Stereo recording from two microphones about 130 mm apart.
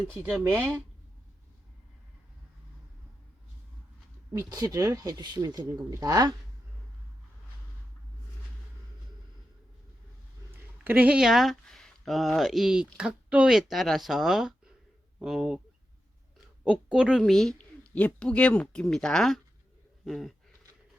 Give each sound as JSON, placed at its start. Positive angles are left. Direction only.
{"t": 0.1, "sound": "speech", "side_deg": -15}
{"t": 4.5, "sound": "speech", "side_deg": -30}
{"t": 10.5, "sound": "a woman's voice", "side_deg": -15}
{"t": 16.6, "sound": "a woman's voice", "side_deg": -5}